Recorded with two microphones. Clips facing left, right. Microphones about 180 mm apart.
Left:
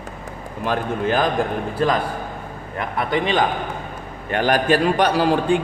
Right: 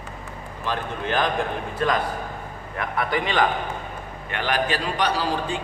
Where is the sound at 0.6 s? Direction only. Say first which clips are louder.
Left 6 dB; 45° left (ahead or behind).